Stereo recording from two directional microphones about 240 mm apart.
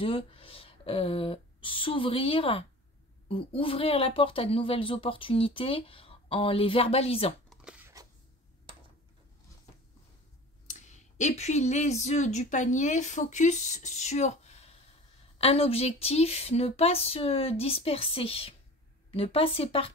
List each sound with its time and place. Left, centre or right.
0.0 s speech: left
7.4 s a sound: centre
10.7 s speech: left